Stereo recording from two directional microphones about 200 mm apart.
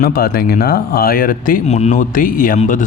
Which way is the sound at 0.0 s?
50° left (ahead or behind).